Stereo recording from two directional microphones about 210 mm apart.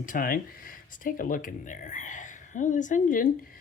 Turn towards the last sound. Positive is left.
turn(degrees=40)  # may be behind; listen again after turning